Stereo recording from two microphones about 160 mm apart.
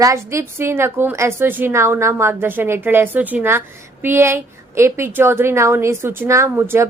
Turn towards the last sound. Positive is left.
turn(degrees=-15)  # may be behind; listen again after turning